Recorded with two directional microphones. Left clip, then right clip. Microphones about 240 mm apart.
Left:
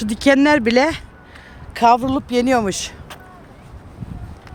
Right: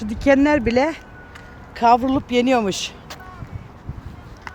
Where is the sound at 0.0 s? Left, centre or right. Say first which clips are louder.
Left 2 dB; left.